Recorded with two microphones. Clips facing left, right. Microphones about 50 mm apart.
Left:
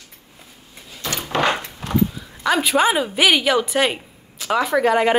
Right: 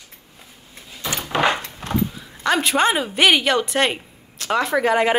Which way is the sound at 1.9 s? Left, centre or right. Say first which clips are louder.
Left 3 dB; centre.